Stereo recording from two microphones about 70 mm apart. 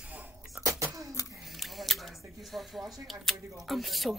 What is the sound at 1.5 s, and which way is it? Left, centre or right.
Squish, centre.